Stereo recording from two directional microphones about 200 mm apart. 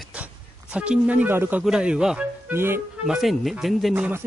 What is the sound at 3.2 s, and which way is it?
Speech, centre (ahead or behind).